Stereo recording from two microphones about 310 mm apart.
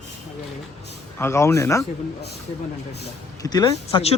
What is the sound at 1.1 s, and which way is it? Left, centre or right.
Speech, centre.